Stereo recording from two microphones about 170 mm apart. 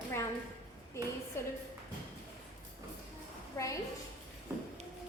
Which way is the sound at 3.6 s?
15° left (ahead or behind).